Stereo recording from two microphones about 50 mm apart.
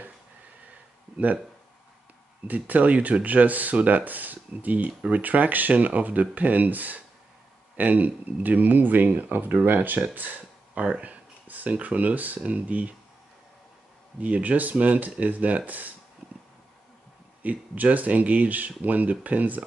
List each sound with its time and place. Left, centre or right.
1.1 s speech: right
2.4 s speech: right
10.1 s a sound: right
11.0 s speech: right
14.2 s speech: right
17.4 s speech: right